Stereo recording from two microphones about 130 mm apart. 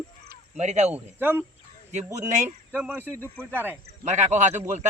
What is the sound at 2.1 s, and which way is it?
Speech, 65° right (ahead or behind).